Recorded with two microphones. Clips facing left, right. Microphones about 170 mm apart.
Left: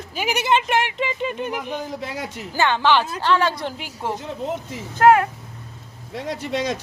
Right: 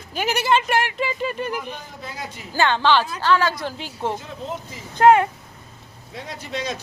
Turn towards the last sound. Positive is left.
turn(degrees=75)  # may be behind; listen again after turning